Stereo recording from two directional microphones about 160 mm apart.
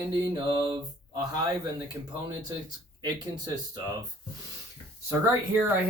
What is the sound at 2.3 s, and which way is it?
Speech, 25° right (ahead or behind).